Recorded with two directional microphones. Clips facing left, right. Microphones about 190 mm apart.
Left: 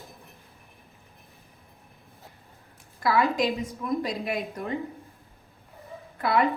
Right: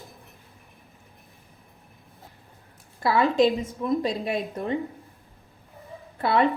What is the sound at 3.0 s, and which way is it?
A woman's voice, 30° right (ahead or behind).